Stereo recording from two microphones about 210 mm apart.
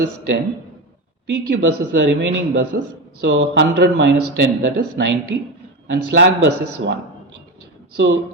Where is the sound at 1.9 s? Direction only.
55° right (ahead or behind).